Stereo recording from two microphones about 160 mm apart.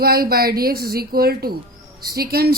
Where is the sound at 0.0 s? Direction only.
70° right (ahead or behind).